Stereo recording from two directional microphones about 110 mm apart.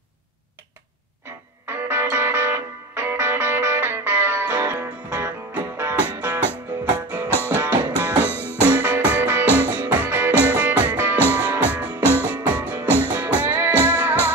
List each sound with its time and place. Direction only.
1.7 s music: 20° right (ahead or behind)
7.2 s music: 20° left (ahead or behind)
7.5 s music: 15° right (ahead or behind)
8.3 s music: 20° left (ahead or behind)
8.6 s music: 15° right (ahead or behind)
12.0 s music: 20° left (ahead or behind)
12.3 s music: 15° right (ahead or behind)
12.8 s music: 20° left (ahead or behind)
13.4 s music: 15° right (ahead or behind)